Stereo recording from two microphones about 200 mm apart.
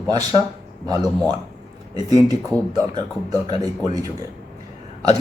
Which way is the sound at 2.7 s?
20° right (ahead or behind).